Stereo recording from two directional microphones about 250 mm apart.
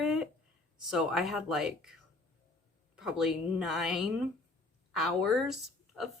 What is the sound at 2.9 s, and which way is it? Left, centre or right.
Speech, centre.